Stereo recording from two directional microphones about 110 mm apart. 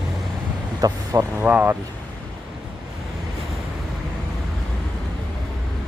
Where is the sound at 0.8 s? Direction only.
35° right (ahead or behind).